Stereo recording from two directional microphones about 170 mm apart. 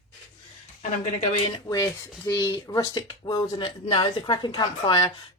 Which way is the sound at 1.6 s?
20° left (ahead or behind).